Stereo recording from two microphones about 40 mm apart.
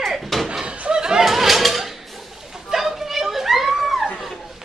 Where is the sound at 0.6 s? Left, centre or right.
Right.